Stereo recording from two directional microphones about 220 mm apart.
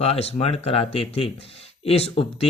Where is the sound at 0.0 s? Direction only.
25° left (ahead or behind).